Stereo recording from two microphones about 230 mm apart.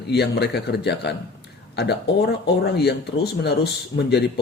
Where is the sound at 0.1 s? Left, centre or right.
Left.